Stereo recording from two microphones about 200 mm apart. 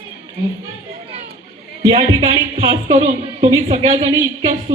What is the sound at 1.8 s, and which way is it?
A woman's voice, 25° right (ahead or behind).